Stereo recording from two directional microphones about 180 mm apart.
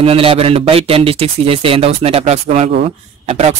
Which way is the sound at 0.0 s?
30° right (ahead or behind).